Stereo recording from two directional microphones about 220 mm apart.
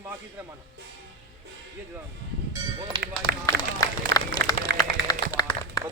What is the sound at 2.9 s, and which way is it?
Speech, 20° right (ahead or behind).